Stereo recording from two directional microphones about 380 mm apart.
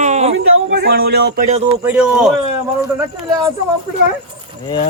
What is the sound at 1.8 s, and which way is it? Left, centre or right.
Speech, centre.